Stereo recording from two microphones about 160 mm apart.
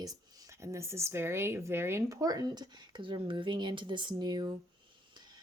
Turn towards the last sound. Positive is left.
turn(degrees=-25)  # may be behind; listen again after turning